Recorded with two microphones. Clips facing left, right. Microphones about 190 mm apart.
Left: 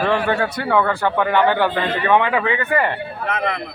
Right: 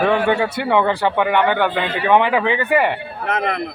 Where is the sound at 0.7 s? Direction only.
20° right (ahead or behind).